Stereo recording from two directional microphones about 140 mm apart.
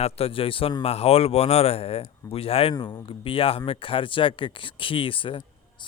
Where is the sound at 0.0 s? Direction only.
45° left (ahead or behind).